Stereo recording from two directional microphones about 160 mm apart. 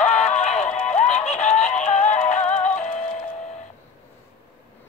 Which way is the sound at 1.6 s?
45° left (ahead or behind).